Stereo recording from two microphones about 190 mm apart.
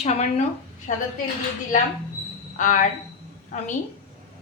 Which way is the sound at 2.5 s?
45° left (ahead or behind).